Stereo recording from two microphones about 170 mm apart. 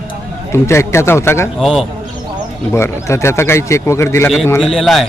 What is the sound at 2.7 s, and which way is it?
Speech, 15° left (ahead or behind).